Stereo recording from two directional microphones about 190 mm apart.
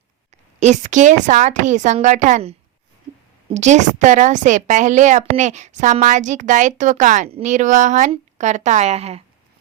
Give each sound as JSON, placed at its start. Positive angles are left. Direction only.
{"t": 0.6, "sound": "a woman's voice", "side_deg": -40}